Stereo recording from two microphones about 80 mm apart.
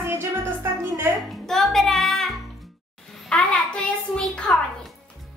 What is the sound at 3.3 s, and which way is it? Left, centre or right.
A child's voice, centre.